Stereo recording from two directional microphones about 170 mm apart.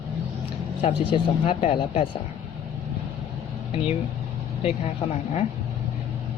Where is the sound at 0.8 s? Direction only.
35° left (ahead or behind).